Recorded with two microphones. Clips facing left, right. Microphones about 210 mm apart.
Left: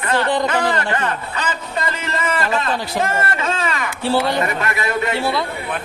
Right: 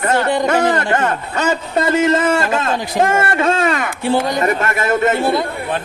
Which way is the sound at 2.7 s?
15° right (ahead or behind).